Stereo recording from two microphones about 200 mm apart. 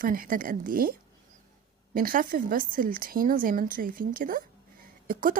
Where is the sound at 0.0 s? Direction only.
45° right (ahead or behind).